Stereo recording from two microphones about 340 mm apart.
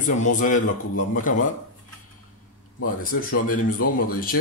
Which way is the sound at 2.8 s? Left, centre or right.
Left.